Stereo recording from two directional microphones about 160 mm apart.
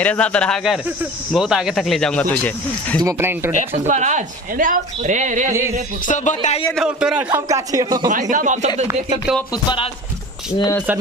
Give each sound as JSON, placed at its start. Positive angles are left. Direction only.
{"t": 0.0, "sound": "speech", "side_deg": 10}
{"t": 3.0, "sound": "speech", "side_deg": -20}
{"t": 3.8, "sound": "a woman's voice", "side_deg": -50}
{"t": 5.5, "sound": "speech", "side_deg": -15}
{"t": 6.0, "sound": "speech", "side_deg": 50}
{"t": 6.7, "sound": "speech", "side_deg": -5}
{"t": 7.2, "sound": "speech", "side_deg": -20}
{"t": 8.1, "sound": "a woman's voice", "side_deg": -55}